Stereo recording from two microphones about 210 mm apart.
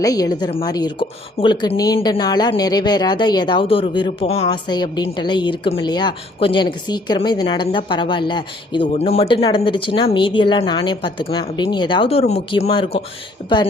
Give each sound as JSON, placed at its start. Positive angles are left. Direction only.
{"t": 0.0, "sound": "speech", "side_deg": 15}